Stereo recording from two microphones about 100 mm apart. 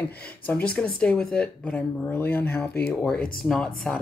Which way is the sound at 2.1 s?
20° left (ahead or behind).